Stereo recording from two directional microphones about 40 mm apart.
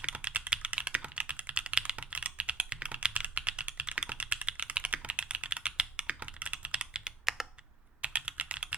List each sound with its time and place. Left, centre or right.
0.0 s typing: right
0.7 s computer keyboard: right
3.1 s typing: right
3.4 s typing: right
4.6 s computer keyboard: right
7.4 s computer keyboard: centre
8.0 s typing: right